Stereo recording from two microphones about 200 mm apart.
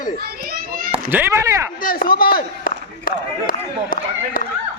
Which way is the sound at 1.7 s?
45° left (ahead or behind).